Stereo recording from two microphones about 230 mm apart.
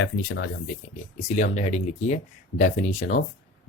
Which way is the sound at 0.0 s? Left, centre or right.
Left.